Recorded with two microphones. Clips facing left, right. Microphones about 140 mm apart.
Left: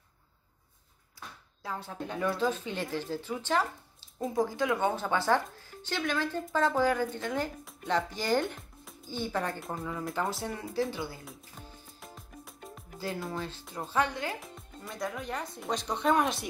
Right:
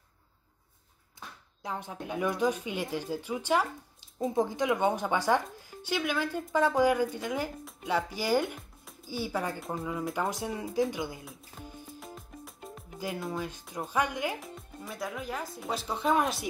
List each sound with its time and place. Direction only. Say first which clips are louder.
1.6 s speech: even; 20° right (ahead or behind); by 9.8 s centre (ahead or behind)
10.1 s speech: right 1 dB; 15° right (ahead or behind)
11.6 s music: right 5 dB; centre (ahead or behind)
13.2 s speech: right 1 dB; 5° right (ahead or behind)
14.8 s speech: left 1 dB; 5° right (ahead or behind)